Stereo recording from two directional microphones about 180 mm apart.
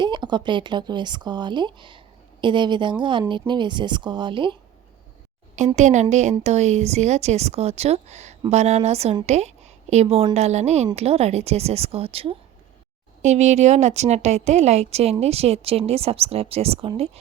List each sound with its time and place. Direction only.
0.0 s speech: 25° right (ahead or behind)
5.5 s speech: 40° right (ahead or behind)